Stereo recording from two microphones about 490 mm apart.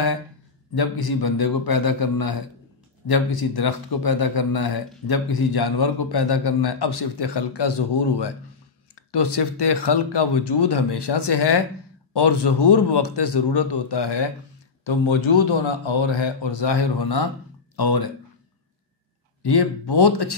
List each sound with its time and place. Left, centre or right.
0.7 s a man's voice: left
14.9 s a man's voice: left
19.4 s a man's voice: left